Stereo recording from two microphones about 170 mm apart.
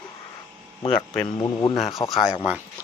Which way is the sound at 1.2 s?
25° left (ahead or behind).